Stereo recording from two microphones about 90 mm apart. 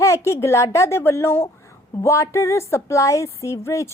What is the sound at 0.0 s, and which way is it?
A woman's voice, 35° left (ahead or behind).